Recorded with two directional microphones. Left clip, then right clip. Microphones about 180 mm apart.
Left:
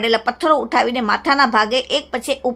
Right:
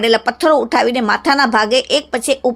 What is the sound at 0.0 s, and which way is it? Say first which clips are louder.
Speech: right 4 dB; 25° right (ahead or behind).